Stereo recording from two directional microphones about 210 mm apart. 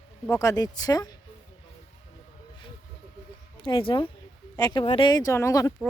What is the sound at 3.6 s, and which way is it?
Speech, 25° left (ahead or behind).